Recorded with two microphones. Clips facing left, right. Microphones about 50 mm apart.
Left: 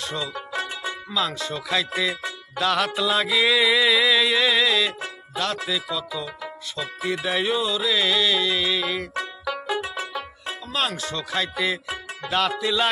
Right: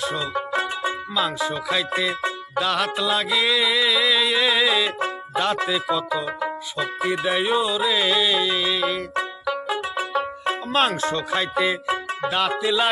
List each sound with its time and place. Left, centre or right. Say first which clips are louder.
0.0 s music: right 4 dB; centre
0.3 s music: right 5 dB; right
1.1 s music: right 1 dB; centre
5.0 s speech: right 5 dB; right
7.0 s music: right 2 dB; centre
9.9 s music: right 6 dB; right; by 12.8 s centre